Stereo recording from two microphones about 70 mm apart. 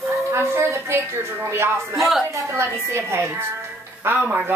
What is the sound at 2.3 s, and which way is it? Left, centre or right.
A woman's voice, right.